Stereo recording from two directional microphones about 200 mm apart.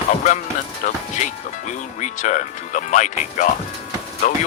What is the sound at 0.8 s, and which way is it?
Speech, 40° left (ahead or behind).